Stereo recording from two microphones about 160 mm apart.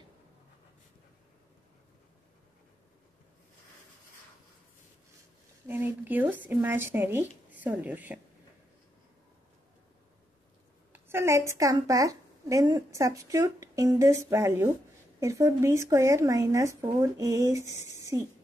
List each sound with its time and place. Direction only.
5.7 s speech: 10° right (ahead or behind)
10.9 s a woman's voice: 15° right (ahead or behind)